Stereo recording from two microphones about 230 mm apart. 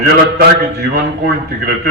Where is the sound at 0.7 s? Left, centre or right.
Right.